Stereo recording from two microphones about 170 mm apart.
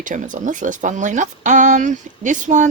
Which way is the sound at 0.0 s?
50° right (ahead or behind).